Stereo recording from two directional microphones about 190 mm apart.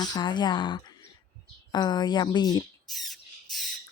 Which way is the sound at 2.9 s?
Centre (ahead or behind).